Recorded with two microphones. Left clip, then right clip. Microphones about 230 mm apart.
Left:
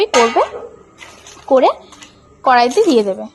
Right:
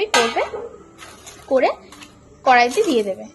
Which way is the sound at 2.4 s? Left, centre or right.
Left.